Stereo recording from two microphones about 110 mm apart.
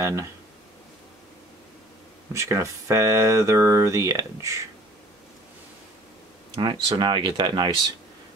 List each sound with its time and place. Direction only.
0.0 s speech: 25° right (ahead or behind)
2.3 s speech: 25° right (ahead or behind)
6.5 s speech: 45° right (ahead or behind)